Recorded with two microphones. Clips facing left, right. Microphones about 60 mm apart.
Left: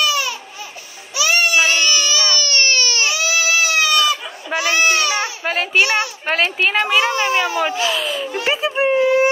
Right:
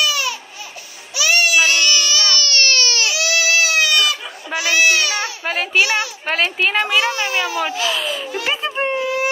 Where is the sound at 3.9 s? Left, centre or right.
Left.